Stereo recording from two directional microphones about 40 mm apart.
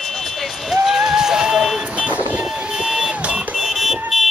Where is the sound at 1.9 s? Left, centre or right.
Right.